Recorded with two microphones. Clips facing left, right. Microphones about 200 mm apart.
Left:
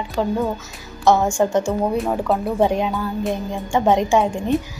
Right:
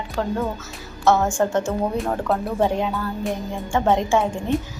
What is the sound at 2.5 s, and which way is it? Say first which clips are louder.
A woman's voice: left 3 dB; 15° left (ahead or behind).